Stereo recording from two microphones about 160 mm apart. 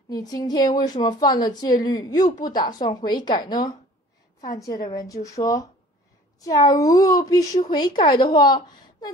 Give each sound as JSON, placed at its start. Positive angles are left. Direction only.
{"t": 0.1, "sound": "a woman's voice", "side_deg": 25}